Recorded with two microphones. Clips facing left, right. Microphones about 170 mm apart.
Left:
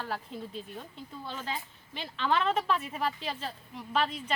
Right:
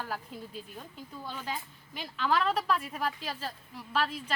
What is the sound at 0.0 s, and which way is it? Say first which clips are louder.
A woman's voice: left 2 dB; 5° right (ahead or behind).